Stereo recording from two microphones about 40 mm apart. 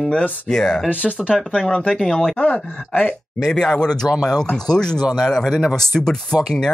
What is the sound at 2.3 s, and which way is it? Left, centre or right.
Speech, left.